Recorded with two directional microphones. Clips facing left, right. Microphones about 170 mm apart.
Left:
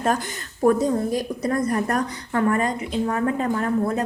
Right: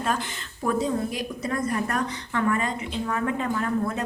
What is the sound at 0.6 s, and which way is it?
A woman's voice, 45° left (ahead or behind).